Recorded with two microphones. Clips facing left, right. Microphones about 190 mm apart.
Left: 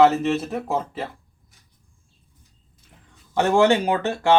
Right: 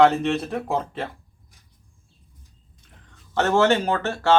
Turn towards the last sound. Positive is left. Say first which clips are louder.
# left 1 dB
turn(degrees=15)  # may be behind; listen again after turning